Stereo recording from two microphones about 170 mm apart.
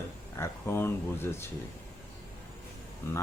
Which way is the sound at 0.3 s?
15° left (ahead or behind).